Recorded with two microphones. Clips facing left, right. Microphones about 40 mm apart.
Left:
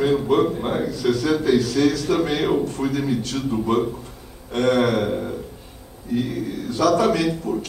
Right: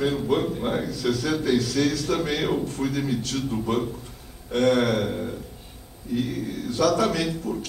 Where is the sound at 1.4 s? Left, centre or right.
Left.